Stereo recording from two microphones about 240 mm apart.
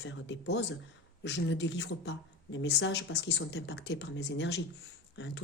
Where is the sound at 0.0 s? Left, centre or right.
Left.